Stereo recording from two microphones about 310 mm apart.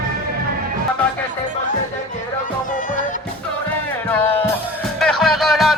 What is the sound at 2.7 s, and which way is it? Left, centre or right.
Music, left.